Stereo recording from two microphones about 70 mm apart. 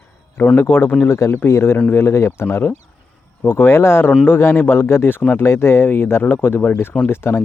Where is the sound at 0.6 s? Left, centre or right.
Left.